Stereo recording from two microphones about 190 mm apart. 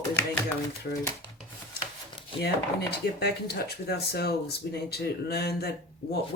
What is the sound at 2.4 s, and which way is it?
Speech, 60° left (ahead or behind).